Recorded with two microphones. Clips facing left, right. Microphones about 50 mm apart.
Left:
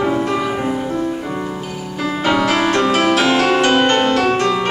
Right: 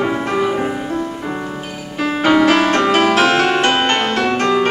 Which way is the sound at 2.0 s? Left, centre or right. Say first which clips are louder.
Right 3 dB; right.